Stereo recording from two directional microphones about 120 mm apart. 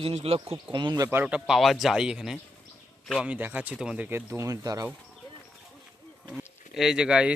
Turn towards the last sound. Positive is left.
turn(degrees=-5)  # may be behind; listen again after turning